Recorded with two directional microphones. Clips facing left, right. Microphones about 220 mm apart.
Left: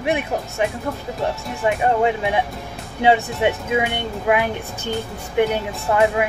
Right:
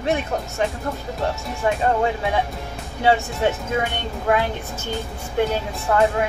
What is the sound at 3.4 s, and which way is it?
Speech, 15° left (ahead or behind).